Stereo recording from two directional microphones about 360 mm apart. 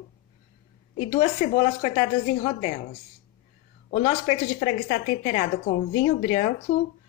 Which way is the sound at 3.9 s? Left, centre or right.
Left.